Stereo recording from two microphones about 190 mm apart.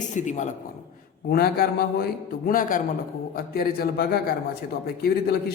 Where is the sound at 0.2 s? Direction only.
40° left (ahead or behind).